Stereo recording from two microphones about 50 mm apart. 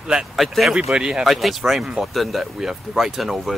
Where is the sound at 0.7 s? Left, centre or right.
Centre.